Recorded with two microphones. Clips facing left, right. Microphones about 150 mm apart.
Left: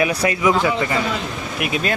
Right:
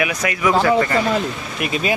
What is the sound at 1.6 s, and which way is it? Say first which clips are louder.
Speech: even; 5° left (ahead or behind).